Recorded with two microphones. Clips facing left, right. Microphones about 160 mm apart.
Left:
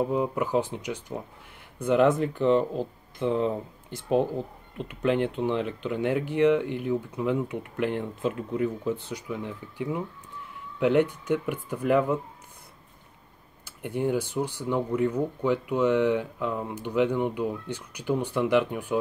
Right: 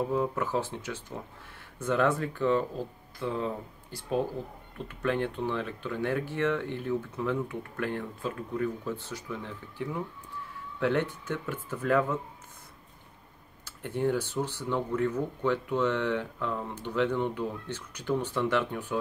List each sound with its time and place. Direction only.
0.0 s speech: 15° left (ahead or behind)
4.7 s speech: 20° left (ahead or behind)
13.7 s speech: 10° left (ahead or behind)